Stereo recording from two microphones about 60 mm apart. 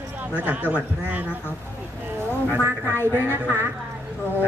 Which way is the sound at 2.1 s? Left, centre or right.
Right.